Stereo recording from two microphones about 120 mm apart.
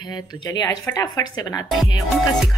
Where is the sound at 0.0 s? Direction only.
35° left (ahead or behind).